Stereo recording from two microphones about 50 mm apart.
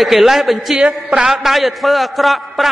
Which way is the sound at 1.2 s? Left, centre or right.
Centre.